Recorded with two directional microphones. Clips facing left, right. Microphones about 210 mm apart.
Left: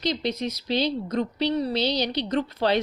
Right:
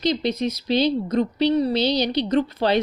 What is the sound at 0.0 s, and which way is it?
A woman's voice, 15° right (ahead or behind).